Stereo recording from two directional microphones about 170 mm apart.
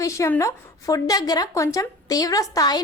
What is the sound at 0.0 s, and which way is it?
A woman's voice, 20° left (ahead or behind).